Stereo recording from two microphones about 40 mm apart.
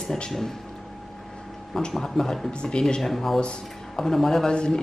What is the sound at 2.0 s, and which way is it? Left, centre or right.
Speech, centre.